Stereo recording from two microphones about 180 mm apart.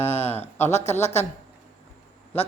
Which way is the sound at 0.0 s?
35° left (ahead or behind).